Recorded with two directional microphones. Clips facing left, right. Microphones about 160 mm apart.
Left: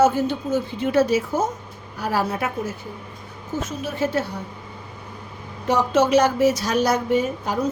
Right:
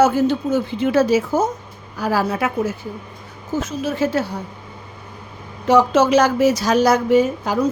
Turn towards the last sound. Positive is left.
turn(degrees=-90)